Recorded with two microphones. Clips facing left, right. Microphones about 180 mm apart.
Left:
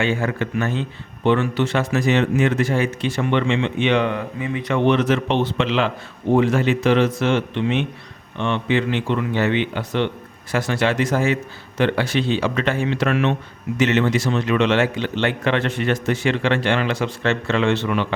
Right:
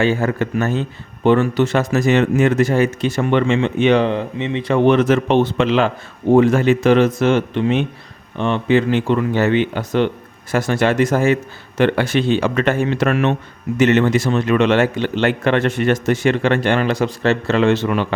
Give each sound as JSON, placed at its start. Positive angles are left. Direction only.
{"t": 0.0, "sound": "a man's voice", "side_deg": -40}
{"t": 4.9, "sound": "a man's voice", "side_deg": -45}